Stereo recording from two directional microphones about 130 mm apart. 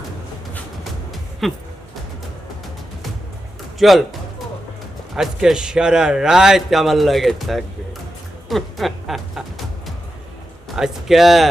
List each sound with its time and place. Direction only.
1.4 s a man's voice: centre (ahead or behind)
3.8 s speech: centre (ahead or behind)
5.1 s a man's voice: 5° right (ahead or behind)
8.4 s a sound: centre (ahead or behind)
10.8 s a man's voice: 5° right (ahead or behind)